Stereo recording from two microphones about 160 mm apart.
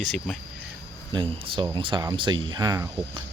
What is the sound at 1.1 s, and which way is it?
Speech, 30° right (ahead or behind).